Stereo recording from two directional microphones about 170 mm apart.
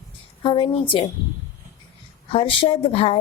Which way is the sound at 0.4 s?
30° left (ahead or behind).